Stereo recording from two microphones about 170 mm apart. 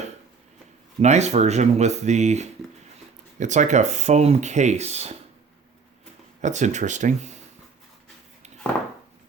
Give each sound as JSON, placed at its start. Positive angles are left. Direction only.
{"t": 1.0, "sound": "speech", "side_deg": -40}
{"t": 6.4, "sound": "speech", "side_deg": -45}